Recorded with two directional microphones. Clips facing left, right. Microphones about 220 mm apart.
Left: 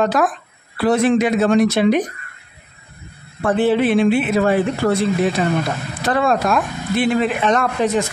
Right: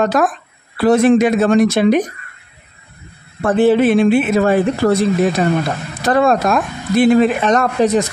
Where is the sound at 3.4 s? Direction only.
45° right (ahead or behind).